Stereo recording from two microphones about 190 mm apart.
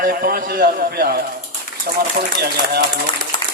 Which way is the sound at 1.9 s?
45° right (ahead or behind).